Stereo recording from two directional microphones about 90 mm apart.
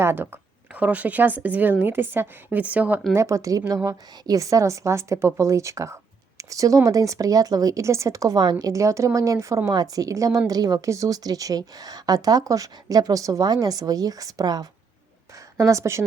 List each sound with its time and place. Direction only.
0.0 s speech: 25° right (ahead or behind)
3.2 s a woman's voice: 35° right (ahead or behind)